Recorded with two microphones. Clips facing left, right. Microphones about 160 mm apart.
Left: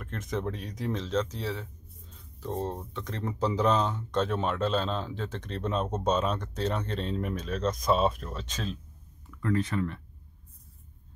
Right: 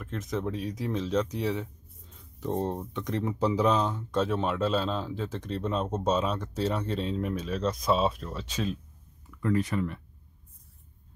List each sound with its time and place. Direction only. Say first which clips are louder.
0.0 s speech: right 1 dB; centre (ahead or behind)